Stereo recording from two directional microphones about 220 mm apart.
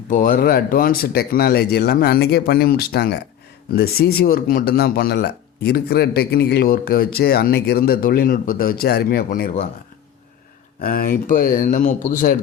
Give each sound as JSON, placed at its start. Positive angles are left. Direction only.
{"t": 0.1, "sound": "speech", "side_deg": 40}
{"t": 10.8, "sound": "speech", "side_deg": 40}